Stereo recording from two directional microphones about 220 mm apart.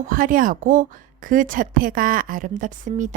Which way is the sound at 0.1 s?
40° right (ahead or behind).